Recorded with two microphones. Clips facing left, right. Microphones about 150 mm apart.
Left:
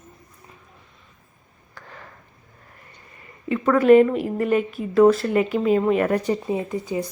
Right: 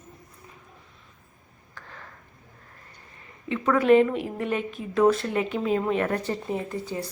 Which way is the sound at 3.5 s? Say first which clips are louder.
Left 5 dB; centre (ahead or behind).